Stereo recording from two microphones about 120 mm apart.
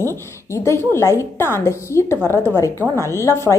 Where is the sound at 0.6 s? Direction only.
20° left (ahead or behind).